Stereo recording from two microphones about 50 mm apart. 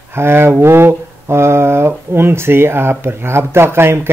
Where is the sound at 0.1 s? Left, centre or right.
Right.